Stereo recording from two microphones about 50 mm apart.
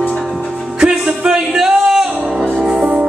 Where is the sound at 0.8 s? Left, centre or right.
Centre.